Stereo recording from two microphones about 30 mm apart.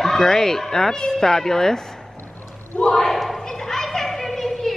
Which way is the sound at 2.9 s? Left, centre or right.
Centre.